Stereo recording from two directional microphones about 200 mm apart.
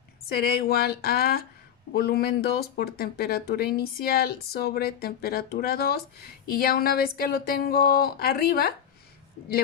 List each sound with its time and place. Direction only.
0.3 s speech: 50° left (ahead or behind)